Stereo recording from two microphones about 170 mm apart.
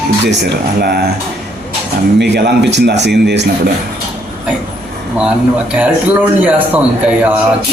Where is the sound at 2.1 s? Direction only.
85° right.